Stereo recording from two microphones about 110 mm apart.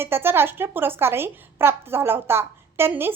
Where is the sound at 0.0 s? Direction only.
20° right (ahead or behind).